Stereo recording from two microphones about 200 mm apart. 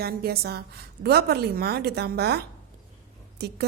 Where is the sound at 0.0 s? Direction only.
50° right (ahead or behind).